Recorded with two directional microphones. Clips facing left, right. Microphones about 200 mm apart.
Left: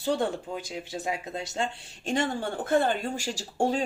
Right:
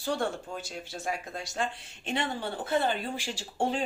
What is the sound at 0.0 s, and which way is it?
Speech, 20° left (ahead or behind).